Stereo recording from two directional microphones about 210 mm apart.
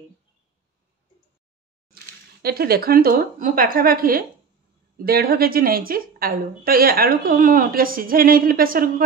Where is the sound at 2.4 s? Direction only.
45° right (ahead or behind).